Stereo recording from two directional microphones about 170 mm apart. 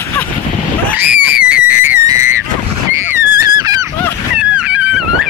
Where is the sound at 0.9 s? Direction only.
10° right (ahead or behind).